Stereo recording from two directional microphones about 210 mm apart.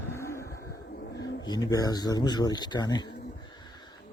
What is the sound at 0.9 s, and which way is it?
Wild animals, 55° left (ahead or behind).